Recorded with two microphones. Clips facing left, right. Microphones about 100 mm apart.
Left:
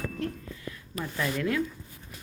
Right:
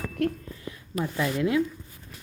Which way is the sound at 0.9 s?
15° right (ahead or behind).